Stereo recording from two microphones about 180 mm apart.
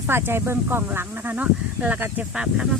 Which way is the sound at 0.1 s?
15° right (ahead or behind).